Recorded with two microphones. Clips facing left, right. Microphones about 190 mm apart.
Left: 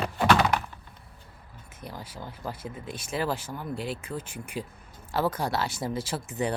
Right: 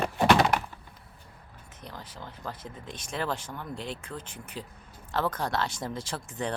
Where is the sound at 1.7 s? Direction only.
10° left (ahead or behind).